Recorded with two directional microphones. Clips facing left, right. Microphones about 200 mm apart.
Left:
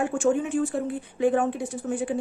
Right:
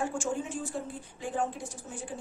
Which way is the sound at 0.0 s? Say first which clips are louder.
Left 9 dB; 60° left (ahead or behind).